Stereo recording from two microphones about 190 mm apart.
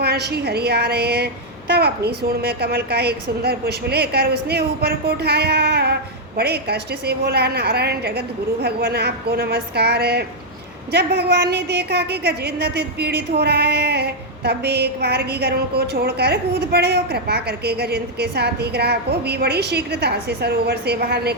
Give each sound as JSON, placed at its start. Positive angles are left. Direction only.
{"t": 0.0, "sound": "a woman's voice", "side_deg": -60}